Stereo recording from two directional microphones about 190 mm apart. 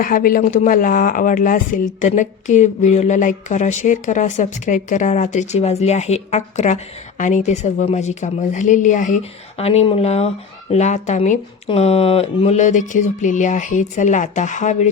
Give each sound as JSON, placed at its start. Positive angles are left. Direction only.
{"t": 0.0, "sound": "speech", "side_deg": 45}